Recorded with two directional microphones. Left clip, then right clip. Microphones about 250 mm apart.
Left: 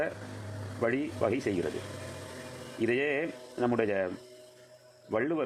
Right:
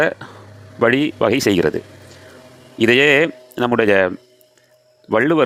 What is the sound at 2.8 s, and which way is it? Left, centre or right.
Speech, right.